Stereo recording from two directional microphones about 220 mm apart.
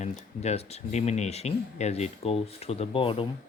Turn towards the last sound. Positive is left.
turn(degrees=25)  # may be behind; listen again after turning